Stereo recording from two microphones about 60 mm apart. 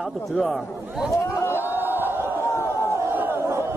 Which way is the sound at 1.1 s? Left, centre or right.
Left.